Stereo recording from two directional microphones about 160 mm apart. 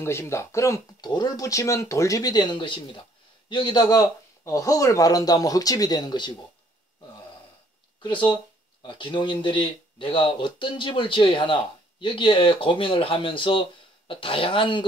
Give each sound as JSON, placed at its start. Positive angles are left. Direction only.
{"t": 0.0, "sound": "speech", "side_deg": 15}
{"t": 8.0, "sound": "speech", "side_deg": 30}